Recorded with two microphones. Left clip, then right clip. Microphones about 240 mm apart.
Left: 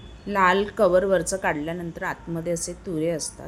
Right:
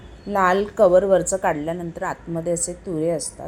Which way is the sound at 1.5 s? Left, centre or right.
Left.